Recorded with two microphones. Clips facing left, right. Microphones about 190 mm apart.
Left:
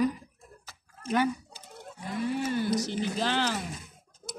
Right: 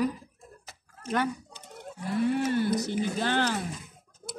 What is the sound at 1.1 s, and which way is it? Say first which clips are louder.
Chicken: left 2 dB; 5° left (ahead or behind).